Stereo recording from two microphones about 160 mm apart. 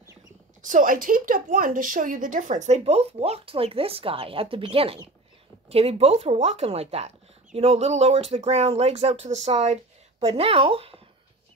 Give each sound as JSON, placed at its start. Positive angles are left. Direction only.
{"t": 0.6, "sound": "a woman's voice", "side_deg": -55}